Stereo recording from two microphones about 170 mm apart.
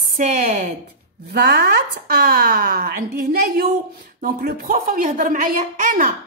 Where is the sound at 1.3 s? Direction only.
65° right (ahead or behind).